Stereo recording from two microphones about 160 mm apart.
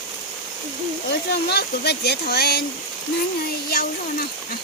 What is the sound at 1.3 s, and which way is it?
Speech, 90° left.